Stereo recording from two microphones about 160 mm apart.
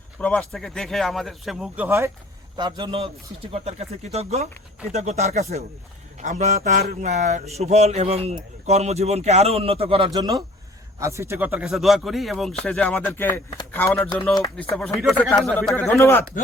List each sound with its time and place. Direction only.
0.2 s speech: 10° left (ahead or behind); by 2.0 s 10° right (ahead or behind)
2.6 s speech: 30° right (ahead or behind); by 15.7 s centre (ahead or behind)
15.7 s a man's voice: 15° left (ahead or behind)